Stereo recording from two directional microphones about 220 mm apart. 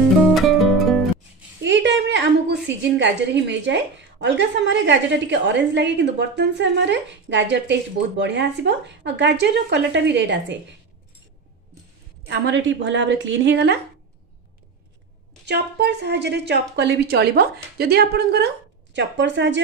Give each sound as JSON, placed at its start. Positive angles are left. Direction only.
{"t": 0.3, "sound": "music", "side_deg": 0}
{"t": 1.6, "sound": "a woman's voice", "side_deg": -55}
{"t": 12.3, "sound": "a woman's voice", "side_deg": -55}
{"t": 15.4, "sound": "a woman's voice", "side_deg": -50}